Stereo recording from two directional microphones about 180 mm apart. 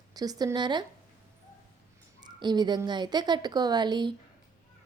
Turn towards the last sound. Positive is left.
turn(degrees=-25)  # may be behind; listen again after turning